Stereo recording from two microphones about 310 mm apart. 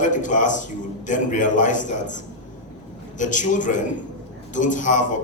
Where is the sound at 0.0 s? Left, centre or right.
Left.